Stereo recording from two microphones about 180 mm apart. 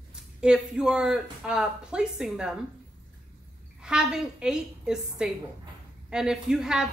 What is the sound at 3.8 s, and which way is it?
Speech, 5° right (ahead or behind).